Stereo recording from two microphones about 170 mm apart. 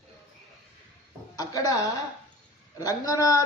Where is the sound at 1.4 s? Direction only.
20° left (ahead or behind).